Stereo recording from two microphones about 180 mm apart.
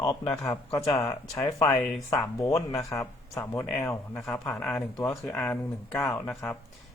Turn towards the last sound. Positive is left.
turn(degrees=10)  # may be behind; listen again after turning